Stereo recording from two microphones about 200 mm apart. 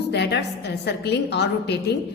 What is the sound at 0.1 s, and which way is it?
A woman's voice, 55° left (ahead or behind).